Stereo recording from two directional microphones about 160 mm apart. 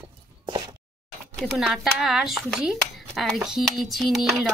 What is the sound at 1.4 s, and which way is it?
Speech, centre (ahead or behind).